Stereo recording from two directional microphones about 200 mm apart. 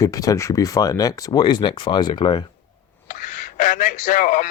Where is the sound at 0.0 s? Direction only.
15° left (ahead or behind).